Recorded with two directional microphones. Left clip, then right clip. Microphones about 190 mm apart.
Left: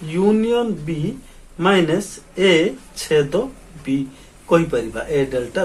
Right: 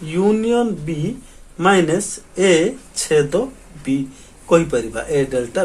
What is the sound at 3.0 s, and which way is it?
Speech, 25° right (ahead or behind).